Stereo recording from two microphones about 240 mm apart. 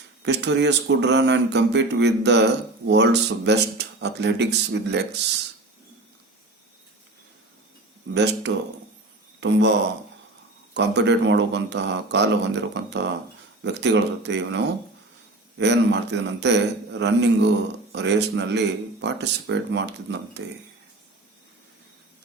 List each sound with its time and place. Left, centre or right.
0.3 s speech: right
8.1 s speech: right
10.8 s speech: right